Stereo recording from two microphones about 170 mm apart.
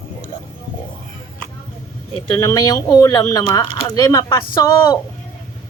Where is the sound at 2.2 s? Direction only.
20° left (ahead or behind).